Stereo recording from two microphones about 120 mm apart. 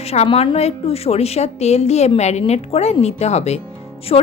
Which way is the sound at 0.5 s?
60° left (ahead or behind).